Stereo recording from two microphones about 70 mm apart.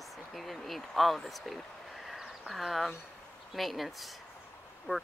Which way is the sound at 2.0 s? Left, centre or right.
Centre.